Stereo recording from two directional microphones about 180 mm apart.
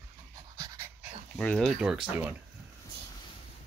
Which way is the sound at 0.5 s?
15° right (ahead or behind).